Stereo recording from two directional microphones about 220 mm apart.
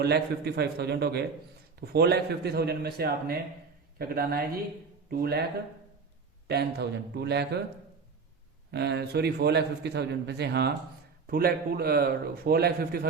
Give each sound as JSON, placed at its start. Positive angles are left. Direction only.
{"t": 0.0, "sound": "a man's voice", "side_deg": -45}
{"t": 6.5, "sound": "a man's voice", "side_deg": -50}
{"t": 8.7, "sound": "a man's voice", "side_deg": -50}